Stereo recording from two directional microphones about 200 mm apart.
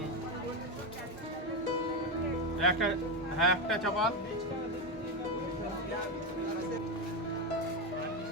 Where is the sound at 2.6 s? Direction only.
Centre (ahead or behind).